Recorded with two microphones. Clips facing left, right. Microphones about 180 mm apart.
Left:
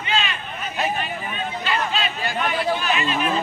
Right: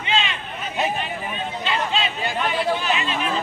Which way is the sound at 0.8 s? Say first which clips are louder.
Right 1 dB; 20° right (ahead or behind).